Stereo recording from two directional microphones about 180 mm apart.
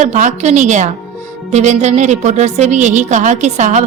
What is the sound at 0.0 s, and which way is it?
Speech, 40° right (ahead or behind).